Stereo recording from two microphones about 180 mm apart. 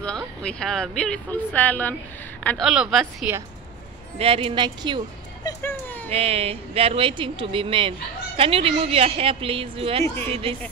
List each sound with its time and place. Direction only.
0.0 s speech: 5° left (ahead or behind)
4.2 s speech: 30° right (ahead or behind)
5.4 s music: 15° left (ahead or behind)
6.0 s speech: 35° right (ahead or behind)